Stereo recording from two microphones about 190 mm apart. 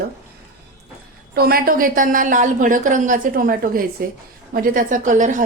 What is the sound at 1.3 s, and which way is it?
A woman's voice, 55° right (ahead or behind).